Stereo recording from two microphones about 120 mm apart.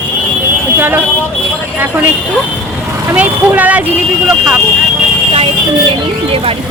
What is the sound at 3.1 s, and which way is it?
Speech, 10° right (ahead or behind).